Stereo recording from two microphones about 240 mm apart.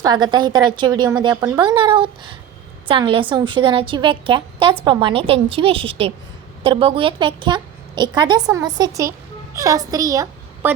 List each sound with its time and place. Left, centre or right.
0.0 s a woman's voice: centre